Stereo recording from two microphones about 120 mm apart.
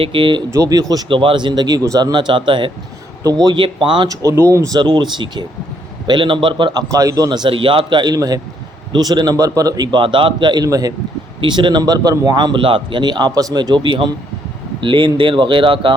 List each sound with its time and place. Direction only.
0.0 s speech: 45° right (ahead or behind)
0.5 s speech: 30° right (ahead or behind)
1.0 s speech: 45° right (ahead or behind)
6.9 s speech: 30° right (ahead or behind)
11.3 s speech: 40° right (ahead or behind)